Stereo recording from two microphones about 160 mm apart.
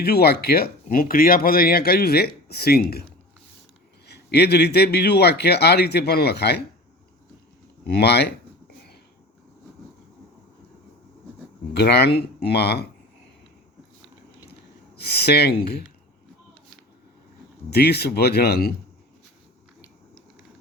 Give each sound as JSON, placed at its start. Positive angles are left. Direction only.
{"t": 0.0, "sound": "speech", "side_deg": 80}
{"t": 4.0, "sound": "a man's voice", "side_deg": 90}
{"t": 7.9, "sound": "a man's voice", "side_deg": 85}
{"t": 11.7, "sound": "a man's voice", "side_deg": 90}
{"t": 14.9, "sound": "a man's voice", "side_deg": 90}
{"t": 17.7, "sound": "a man's voice", "side_deg": 90}